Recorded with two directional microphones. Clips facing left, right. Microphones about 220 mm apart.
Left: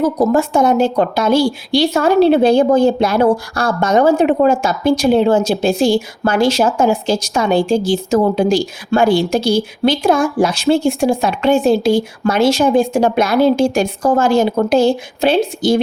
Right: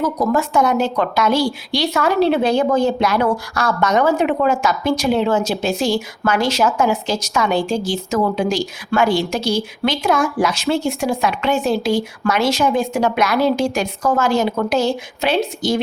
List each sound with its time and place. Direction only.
0.0 s a woman's voice: 30° left (ahead or behind)